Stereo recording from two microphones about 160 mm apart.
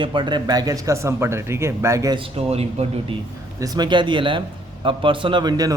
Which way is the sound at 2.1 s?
40° right (ahead or behind).